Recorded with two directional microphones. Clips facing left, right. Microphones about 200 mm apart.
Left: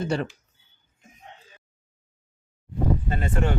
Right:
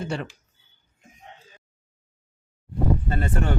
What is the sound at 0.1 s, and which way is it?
Speech, 40° left (ahead or behind).